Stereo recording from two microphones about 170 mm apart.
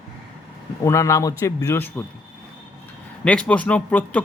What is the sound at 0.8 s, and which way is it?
Speech, 15° left (ahead or behind).